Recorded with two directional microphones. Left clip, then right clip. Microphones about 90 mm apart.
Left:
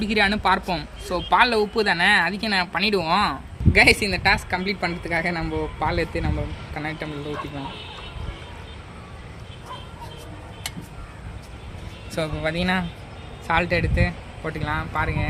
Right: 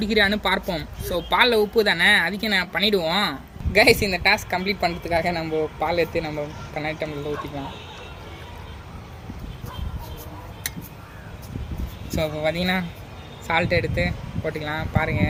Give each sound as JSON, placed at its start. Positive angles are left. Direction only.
{"t": 0.0, "sound": "speech", "side_deg": 45}
{"t": 12.1, "sound": "speech", "side_deg": 60}